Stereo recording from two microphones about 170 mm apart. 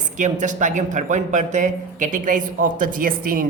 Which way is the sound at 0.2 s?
45° right (ahead or behind).